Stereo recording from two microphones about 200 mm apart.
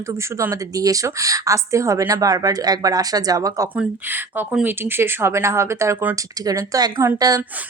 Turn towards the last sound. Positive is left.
turn(degrees=-20)  # may be behind; listen again after turning